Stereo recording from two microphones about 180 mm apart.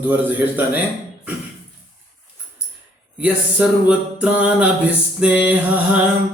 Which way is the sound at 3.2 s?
5° right (ahead or behind).